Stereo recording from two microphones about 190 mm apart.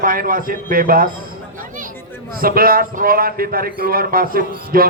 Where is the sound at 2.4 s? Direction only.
50° right (ahead or behind).